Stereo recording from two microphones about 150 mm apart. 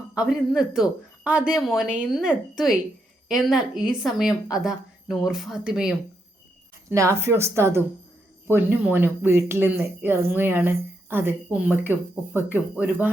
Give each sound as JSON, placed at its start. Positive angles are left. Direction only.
{"t": 0.1, "sound": "speech", "side_deg": -5}
{"t": 6.9, "sound": "speech", "side_deg": -20}